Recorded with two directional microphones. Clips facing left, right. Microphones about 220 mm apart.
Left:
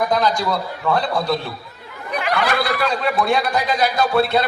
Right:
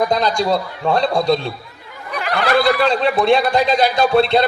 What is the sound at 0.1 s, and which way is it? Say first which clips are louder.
A man's voice: right 2 dB; 25° right (ahead or behind).